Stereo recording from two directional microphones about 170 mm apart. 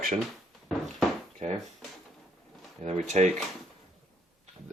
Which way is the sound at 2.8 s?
40° right (ahead or behind).